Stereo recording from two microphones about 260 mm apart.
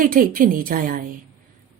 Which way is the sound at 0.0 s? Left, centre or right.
Right.